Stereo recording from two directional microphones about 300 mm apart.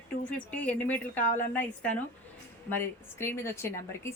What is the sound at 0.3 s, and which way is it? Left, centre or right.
Speech, centre.